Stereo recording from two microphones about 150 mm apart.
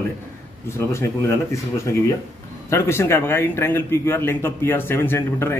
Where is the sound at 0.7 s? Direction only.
15° left (ahead or behind).